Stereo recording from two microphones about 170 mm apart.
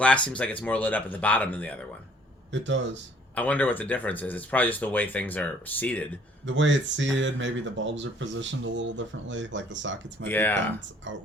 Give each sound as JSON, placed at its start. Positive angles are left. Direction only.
{"t": 0.0, "sound": "speech", "side_deg": 5}
{"t": 2.5, "sound": "speech", "side_deg": -90}
{"t": 3.3, "sound": "speech", "side_deg": 10}
{"t": 6.4, "sound": "speech", "side_deg": -90}
{"t": 10.2, "sound": "speech", "side_deg": 10}
{"t": 11.1, "sound": "speech", "side_deg": -90}